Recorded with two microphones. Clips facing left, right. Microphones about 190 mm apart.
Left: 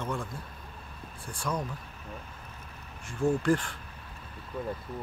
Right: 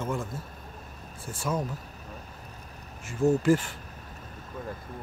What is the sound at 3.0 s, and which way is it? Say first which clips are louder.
Speech: right 4 dB; 5° right (ahead or behind).